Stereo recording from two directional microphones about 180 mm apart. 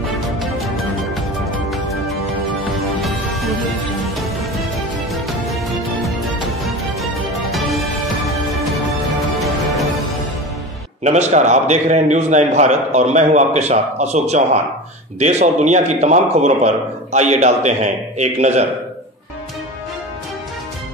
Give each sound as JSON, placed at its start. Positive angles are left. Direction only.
{"t": 2.6, "sound": "music", "side_deg": 0}
{"t": 7.5, "sound": "music", "side_deg": 0}
{"t": 9.4, "sound": "music", "side_deg": 0}
{"t": 11.1, "sound": "a man's voice", "side_deg": -40}